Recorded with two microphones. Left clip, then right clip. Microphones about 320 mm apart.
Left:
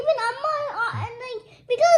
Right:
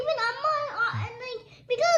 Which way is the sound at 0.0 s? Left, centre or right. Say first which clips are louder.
Left 4 dB; centre.